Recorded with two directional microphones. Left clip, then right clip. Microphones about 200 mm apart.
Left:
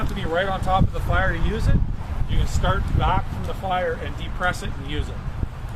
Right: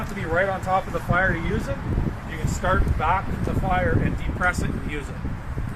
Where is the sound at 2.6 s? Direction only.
5° left (ahead or behind).